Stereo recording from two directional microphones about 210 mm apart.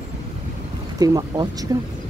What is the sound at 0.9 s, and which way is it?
Speech, 15° right (ahead or behind).